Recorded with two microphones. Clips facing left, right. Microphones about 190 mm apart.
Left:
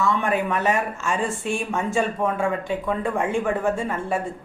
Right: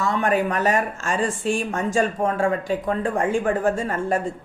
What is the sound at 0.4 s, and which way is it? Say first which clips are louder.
Speech: right 1 dB; 40° right (ahead or behind).